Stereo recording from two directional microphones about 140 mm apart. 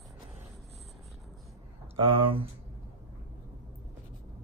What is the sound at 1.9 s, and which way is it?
Speech, 40° right (ahead or behind).